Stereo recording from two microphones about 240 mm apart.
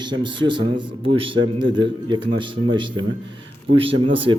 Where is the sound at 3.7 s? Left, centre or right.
Right.